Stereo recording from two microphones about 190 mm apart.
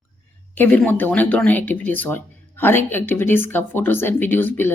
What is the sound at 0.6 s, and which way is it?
Speech, 10° left (ahead or behind).